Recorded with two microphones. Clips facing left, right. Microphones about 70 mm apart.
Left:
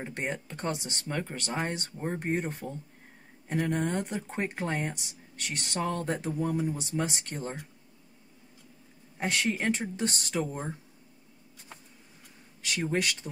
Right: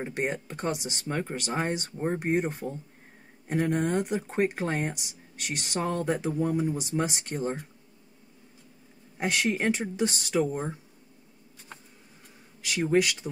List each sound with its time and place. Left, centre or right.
0.0 s speech: centre
9.2 s speech: centre
12.6 s speech: centre